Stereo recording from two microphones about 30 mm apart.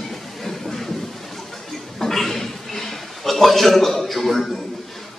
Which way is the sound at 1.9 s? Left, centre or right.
Centre.